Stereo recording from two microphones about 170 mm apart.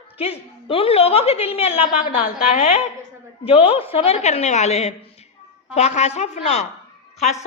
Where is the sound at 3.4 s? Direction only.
35° left (ahead or behind).